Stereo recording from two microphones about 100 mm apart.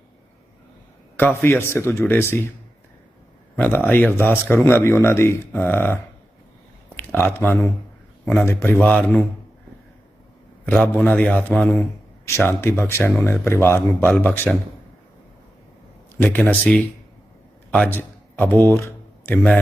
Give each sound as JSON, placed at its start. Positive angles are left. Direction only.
{"t": 1.1, "sound": "speech", "side_deg": 20}
{"t": 3.5, "sound": "speech", "side_deg": 20}
{"t": 10.9, "sound": "speech", "side_deg": 15}
{"t": 12.2, "sound": "speech", "side_deg": 25}
{"t": 16.1, "sound": "speech", "side_deg": 20}
{"t": 17.8, "sound": "a sound", "side_deg": 20}